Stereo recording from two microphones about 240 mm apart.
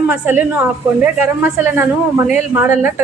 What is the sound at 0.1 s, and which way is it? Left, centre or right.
A woman's voice, centre.